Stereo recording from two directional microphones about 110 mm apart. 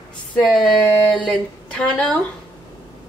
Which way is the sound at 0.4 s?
5° left (ahead or behind).